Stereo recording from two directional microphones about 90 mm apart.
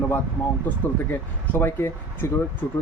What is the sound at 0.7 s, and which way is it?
Speech, 20° left (ahead or behind).